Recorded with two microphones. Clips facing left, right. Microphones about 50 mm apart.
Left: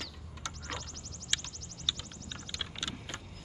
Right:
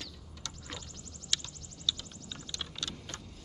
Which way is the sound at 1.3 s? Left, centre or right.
Left.